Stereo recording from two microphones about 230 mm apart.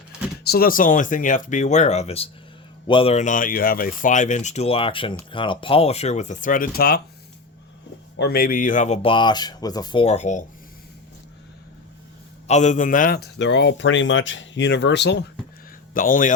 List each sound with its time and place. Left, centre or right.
0.4 s speech: left
8.1 s speech: left
12.5 s speech: left
16.0 s speech: left